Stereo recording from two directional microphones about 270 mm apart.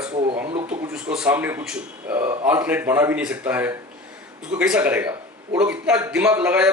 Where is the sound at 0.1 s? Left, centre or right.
Centre.